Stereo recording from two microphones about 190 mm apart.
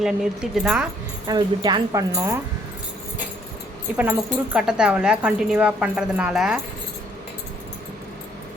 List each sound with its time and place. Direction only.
0.0 s speech: centre (ahead or behind)
1.3 s speech: 25° right (ahead or behind)
3.9 s speech: 5° right (ahead or behind)